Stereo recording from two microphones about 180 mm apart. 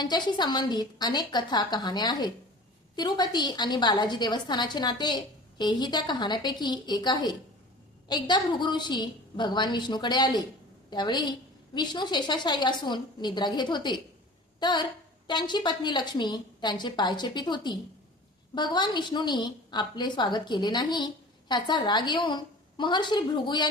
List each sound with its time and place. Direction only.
0.0 s a woman's voice: 25° left (ahead or behind)